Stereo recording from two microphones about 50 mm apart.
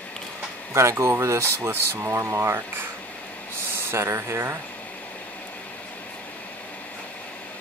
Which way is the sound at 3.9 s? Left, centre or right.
Right.